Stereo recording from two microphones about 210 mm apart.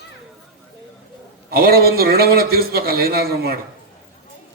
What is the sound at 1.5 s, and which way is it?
A man's voice, 45° right (ahead or behind).